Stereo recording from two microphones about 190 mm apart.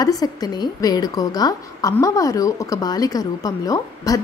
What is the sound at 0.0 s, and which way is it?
A woman's voice, 20° left (ahead or behind).